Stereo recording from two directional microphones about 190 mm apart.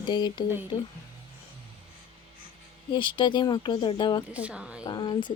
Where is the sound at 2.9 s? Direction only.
25° left (ahead or behind).